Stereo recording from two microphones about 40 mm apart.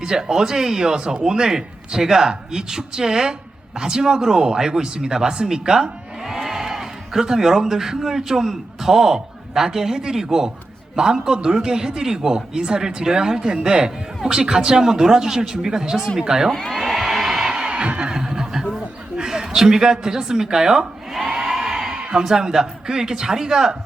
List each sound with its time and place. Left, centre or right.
0.0 s a man's voice: centre
16.5 s speech: centre
16.7 s a sound: centre
17.5 s a sound: right
18.1 s neigh: centre
19.1 s a woman's voice: centre
21.2 s crowd: centre
21.9 s a sound: right
22.2 s a man's voice: centre